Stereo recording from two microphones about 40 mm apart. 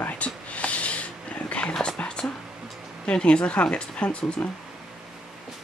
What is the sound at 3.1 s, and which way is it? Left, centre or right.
Speech, left.